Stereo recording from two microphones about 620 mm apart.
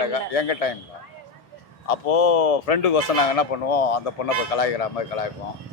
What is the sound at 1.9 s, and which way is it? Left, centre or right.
Speech, left.